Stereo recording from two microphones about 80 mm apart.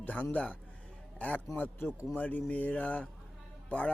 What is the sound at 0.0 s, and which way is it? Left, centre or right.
A man's voice, centre.